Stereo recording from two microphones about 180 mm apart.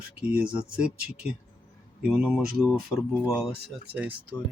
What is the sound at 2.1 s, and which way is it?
Speech, 5° right (ahead or behind).